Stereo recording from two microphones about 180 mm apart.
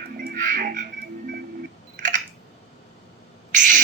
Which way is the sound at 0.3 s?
45° right (ahead or behind).